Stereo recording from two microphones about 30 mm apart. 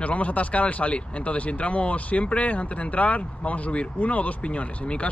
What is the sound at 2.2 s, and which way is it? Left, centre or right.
Speech, left.